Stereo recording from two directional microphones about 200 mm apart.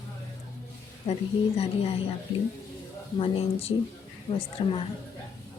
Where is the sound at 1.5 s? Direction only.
30° left (ahead or behind).